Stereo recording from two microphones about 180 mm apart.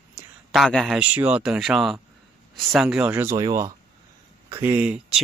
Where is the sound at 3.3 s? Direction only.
20° right (ahead or behind).